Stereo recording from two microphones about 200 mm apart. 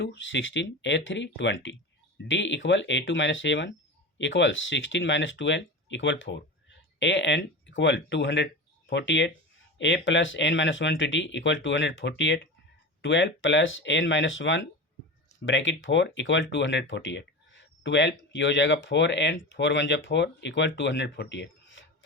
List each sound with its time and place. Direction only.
0.0 s speech: 65° left (ahead or behind)